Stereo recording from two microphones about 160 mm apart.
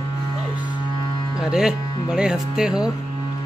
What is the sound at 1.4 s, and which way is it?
Speech, 5° right (ahead or behind).